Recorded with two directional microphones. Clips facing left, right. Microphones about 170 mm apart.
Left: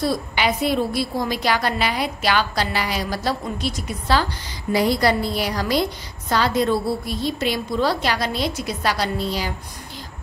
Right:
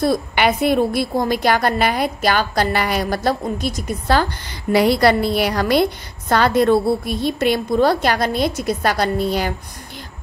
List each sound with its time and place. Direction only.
0.0 s a woman's voice: 55° right (ahead or behind)